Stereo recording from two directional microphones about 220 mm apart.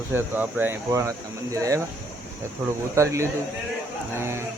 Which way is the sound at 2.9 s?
15° right (ahead or behind).